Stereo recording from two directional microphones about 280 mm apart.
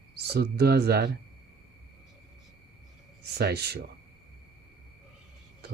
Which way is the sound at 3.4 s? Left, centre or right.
Right.